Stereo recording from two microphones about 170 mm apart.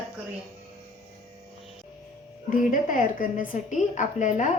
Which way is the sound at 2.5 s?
50° left (ahead or behind).